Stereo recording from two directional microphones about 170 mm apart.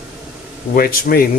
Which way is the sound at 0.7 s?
60° left (ahead or behind).